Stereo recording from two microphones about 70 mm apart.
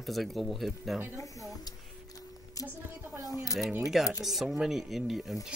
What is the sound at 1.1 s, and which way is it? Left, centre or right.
Speech, left.